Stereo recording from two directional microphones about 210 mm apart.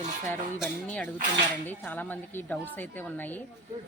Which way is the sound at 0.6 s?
5° left (ahead or behind).